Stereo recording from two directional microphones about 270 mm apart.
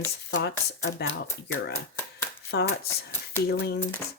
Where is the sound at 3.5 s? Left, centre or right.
Left.